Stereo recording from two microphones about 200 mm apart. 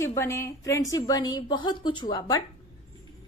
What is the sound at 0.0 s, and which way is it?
A woman's voice, 15° left (ahead or behind).